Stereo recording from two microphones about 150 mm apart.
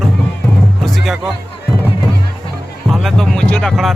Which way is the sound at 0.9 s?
Centre (ahead or behind).